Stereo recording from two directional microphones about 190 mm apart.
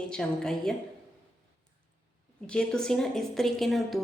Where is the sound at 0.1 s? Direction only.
5° left (ahead or behind).